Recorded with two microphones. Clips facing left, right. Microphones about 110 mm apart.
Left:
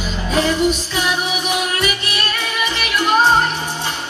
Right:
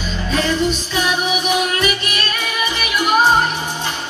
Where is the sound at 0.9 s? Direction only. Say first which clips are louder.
Right 1 dB; 15° right (ahead or behind).